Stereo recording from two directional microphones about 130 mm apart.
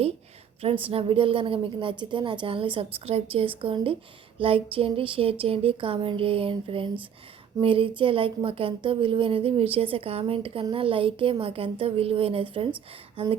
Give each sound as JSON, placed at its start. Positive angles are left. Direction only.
{"t": 0.6, "sound": "a woman's voice", "side_deg": -50}